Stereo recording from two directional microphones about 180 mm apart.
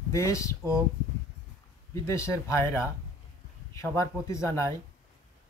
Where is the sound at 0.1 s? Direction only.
15° left (ahead or behind).